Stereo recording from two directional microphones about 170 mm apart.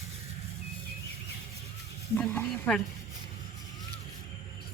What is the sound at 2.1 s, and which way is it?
Sizzle, 10° left (ahead or behind).